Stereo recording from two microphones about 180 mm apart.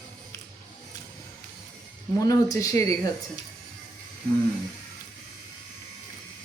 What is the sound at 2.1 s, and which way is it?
Speech, 20° left (ahead or behind).